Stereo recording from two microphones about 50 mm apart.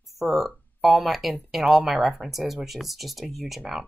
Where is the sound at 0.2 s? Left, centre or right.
Centre.